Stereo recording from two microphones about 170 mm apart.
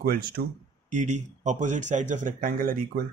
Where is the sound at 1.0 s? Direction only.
45° right (ahead or behind).